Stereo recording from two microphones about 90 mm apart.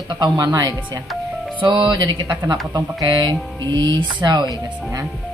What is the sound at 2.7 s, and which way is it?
Speech, 45° right (ahead or behind).